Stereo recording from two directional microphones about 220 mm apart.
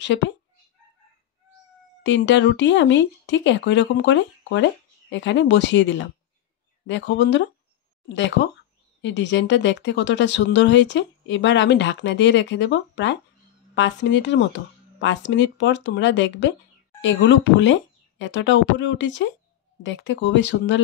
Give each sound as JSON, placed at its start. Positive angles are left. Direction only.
{"t": 0.0, "sound": "speech", "side_deg": 55}
{"t": 2.0, "sound": "speech", "side_deg": 55}